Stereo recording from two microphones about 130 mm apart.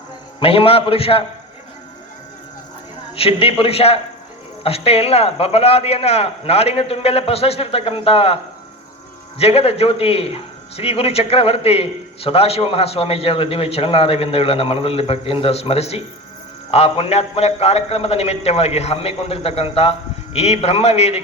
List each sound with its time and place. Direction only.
0.3 s speech: 45° left (ahead or behind)
3.2 s speech: 45° left (ahead or behind)
9.4 s speech: 50° left (ahead or behind)